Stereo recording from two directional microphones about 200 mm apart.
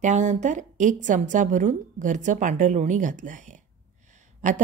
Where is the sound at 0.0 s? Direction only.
35° right (ahead or behind).